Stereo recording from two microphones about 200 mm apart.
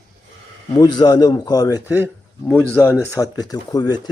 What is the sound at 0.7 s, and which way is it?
Speech, 20° left (ahead or behind).